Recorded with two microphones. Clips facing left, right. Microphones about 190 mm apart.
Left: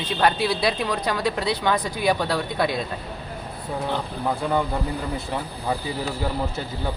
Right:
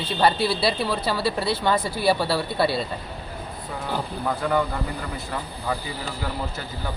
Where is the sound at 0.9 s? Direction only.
5° right (ahead or behind).